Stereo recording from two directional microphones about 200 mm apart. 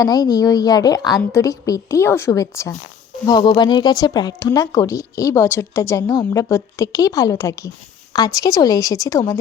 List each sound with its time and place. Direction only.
0.0 s speech: 20° left (ahead or behind)